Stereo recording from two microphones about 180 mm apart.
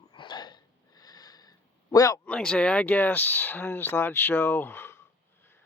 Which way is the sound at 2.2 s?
5° left (ahead or behind).